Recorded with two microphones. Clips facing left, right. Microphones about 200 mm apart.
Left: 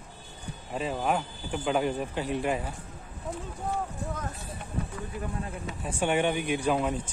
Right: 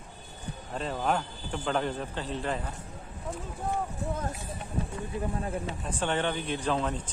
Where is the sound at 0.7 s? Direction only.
5° left (ahead or behind).